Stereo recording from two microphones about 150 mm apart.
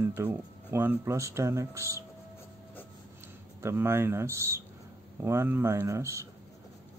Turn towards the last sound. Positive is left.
turn(degrees=-20)  # may be behind; listen again after turning